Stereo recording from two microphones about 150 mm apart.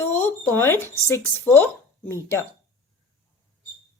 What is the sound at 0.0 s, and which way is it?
Speech, 15° left (ahead or behind).